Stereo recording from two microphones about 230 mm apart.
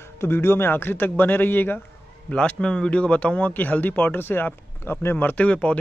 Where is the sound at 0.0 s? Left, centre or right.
Centre.